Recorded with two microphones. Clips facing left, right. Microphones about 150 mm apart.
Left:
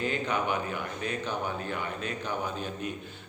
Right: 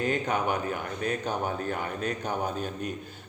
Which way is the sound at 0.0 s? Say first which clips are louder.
Right 2 dB; 45° right (ahead or behind).